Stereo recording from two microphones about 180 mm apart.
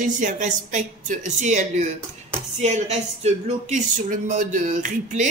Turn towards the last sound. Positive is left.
turn(degrees=-45)  # may be behind; listen again after turning